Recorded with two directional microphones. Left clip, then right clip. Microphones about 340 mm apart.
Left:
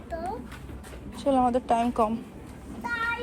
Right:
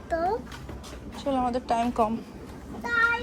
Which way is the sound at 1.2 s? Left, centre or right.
Centre.